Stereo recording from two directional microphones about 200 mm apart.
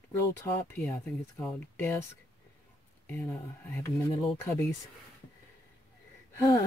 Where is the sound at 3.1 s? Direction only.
10° left (ahead or behind).